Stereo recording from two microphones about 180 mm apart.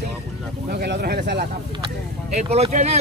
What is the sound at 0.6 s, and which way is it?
Speech, 65° right (ahead or behind).